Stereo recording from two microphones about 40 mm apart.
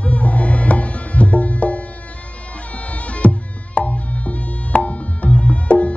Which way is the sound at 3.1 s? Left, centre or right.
Left.